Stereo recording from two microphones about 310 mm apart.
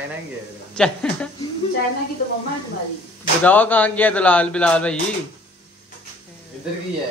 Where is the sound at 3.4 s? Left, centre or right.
Centre.